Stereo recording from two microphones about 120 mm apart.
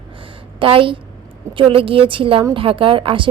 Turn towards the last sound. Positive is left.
turn(degrees=-45)  # may be behind; listen again after turning